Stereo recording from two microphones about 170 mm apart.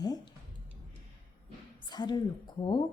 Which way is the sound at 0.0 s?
25° left (ahead or behind).